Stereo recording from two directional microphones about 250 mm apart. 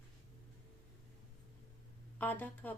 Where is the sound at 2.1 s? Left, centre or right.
Centre.